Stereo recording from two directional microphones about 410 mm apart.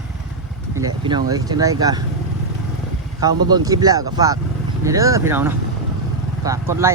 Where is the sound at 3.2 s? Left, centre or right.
Centre.